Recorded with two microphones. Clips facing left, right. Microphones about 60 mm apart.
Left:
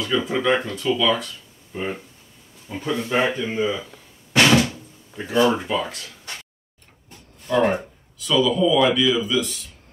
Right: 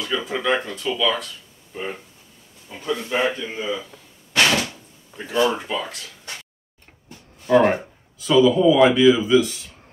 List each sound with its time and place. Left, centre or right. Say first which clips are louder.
0.0 s speech: left 3 dB; centre
4.4 s door: left 3 dB; centre
5.4 s speech: left 2 dB; centre
8.3 s speech: right 4 dB; centre